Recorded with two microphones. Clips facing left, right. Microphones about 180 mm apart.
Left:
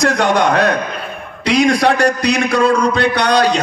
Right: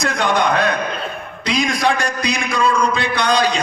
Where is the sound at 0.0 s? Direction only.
75° left (ahead or behind).